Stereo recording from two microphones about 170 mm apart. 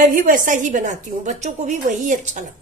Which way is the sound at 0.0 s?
55° right (ahead or behind).